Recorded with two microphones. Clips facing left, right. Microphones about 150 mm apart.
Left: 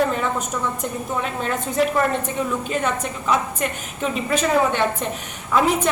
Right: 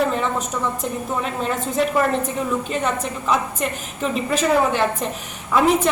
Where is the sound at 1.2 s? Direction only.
Centre (ahead or behind).